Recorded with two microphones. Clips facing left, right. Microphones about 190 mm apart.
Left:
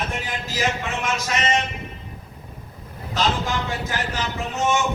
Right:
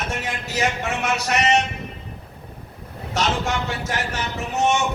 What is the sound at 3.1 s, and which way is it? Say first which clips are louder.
A man's voice: even; 75° right (ahead or behind).